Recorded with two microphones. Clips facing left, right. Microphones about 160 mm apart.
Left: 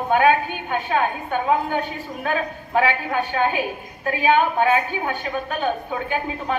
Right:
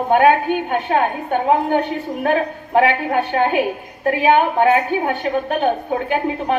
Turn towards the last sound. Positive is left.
turn(degrees=-60)  # may be behind; listen again after turning